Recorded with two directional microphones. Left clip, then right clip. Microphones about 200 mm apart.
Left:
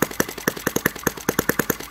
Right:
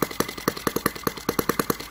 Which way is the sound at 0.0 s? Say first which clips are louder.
Left 3 dB; 25° left (ahead or behind).